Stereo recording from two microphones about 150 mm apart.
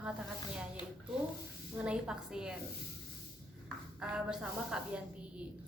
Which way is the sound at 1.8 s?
5° right (ahead or behind).